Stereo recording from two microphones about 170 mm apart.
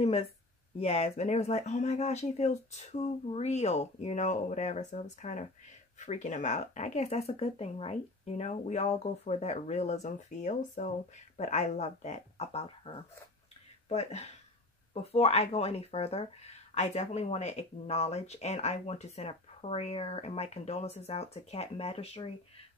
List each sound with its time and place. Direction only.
0.7 s speech: 35° left (ahead or behind)